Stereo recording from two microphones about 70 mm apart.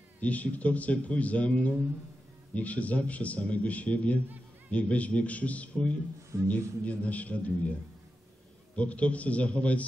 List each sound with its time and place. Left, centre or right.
0.2 s a man's voice: left
8.7 s a man's voice: centre